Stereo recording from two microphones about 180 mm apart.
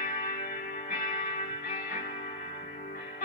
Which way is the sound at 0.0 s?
55° left (ahead or behind).